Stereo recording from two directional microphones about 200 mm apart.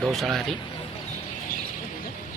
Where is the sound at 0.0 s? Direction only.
Centre (ahead or behind).